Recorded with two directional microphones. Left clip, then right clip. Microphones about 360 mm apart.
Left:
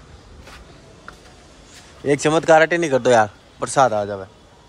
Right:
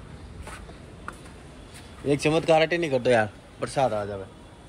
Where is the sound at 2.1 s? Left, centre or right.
Left.